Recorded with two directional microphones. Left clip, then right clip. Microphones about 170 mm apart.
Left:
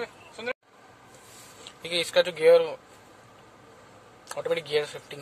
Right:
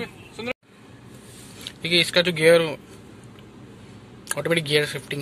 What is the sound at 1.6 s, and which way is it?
Speech, 15° left (ahead or behind).